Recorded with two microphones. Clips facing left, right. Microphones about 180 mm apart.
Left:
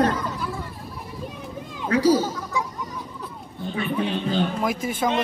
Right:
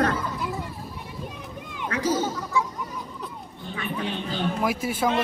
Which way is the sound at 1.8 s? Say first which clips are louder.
Left 7 dB; 30° left (ahead or behind).